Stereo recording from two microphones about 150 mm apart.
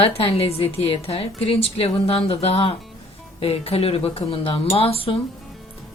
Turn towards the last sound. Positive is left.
turn(degrees=40)  # may be behind; listen again after turning